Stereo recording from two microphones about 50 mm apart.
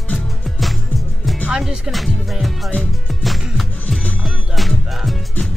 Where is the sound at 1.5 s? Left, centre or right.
Centre.